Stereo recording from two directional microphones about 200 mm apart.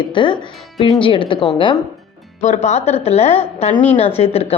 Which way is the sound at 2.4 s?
35° left (ahead or behind).